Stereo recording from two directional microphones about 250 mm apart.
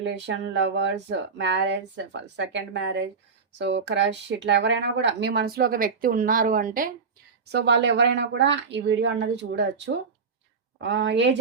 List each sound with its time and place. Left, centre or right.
0.0 s speech: right